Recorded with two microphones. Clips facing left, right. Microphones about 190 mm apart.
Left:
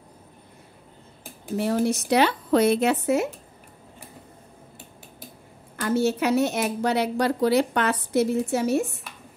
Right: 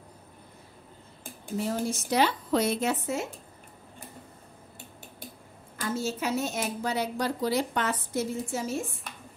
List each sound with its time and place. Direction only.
1.6 s speech: 70° left (ahead or behind)
5.8 s speech: 65° left (ahead or behind)